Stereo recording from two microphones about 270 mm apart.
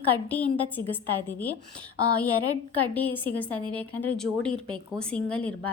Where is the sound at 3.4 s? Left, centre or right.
Centre.